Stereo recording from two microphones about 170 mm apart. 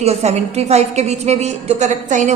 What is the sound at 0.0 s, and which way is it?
A woman's voice, 40° right (ahead or behind).